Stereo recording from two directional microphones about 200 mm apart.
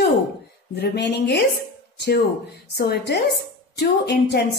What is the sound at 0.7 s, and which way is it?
Speech, 55° left (ahead or behind).